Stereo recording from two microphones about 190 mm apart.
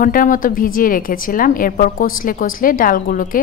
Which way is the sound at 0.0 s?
45° left (ahead or behind).